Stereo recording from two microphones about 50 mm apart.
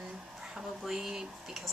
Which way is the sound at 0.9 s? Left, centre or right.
Centre.